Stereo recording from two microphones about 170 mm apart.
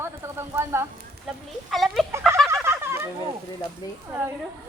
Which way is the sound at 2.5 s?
15° right (ahead or behind).